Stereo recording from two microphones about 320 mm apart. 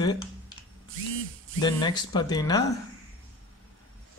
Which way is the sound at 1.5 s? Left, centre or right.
Centre.